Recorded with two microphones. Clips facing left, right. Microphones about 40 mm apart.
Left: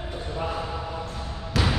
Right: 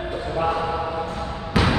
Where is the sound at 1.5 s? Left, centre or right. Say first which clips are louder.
Right 5 dB; right.